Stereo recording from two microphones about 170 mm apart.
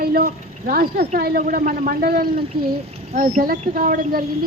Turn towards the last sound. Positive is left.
turn(degrees=-55)  # may be behind; listen again after turning